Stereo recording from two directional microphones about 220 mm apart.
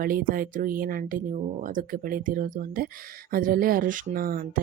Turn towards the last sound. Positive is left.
turn(degrees=-40)  # may be behind; listen again after turning